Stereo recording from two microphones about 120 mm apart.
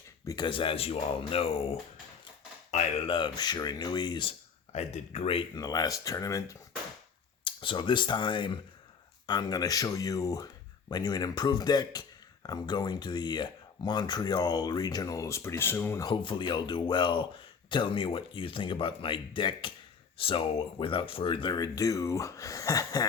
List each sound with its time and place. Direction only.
0.3 s speech: 40° left (ahead or behind); by 1.7 s 55° left (ahead or behind)
2.7 s a sound: 70° left (ahead or behind)
3.1 s speech: 40° left (ahead or behind)
4.7 s speech: 65° left (ahead or behind)
5.5 s speech: 30° left (ahead or behind)
7.4 s speech: 45° left (ahead or behind); by 16.0 s 20° left (ahead or behind)
16.0 s speech: 40° left (ahead or behind)